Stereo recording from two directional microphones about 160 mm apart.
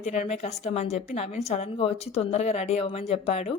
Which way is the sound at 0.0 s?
45° left (ahead or behind).